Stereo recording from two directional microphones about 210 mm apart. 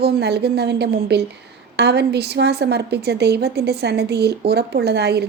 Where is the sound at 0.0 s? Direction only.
50° right (ahead or behind).